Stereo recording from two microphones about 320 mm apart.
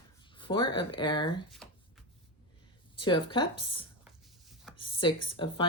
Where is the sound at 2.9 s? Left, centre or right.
Centre.